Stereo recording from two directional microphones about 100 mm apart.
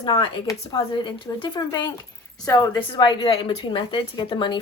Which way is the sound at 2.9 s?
55° left (ahead or behind).